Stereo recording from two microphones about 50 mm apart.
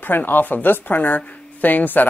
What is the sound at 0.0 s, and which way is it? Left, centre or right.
Speech, left.